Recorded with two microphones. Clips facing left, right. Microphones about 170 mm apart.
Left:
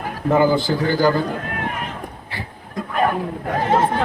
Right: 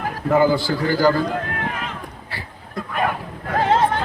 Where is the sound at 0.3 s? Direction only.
20° left (ahead or behind).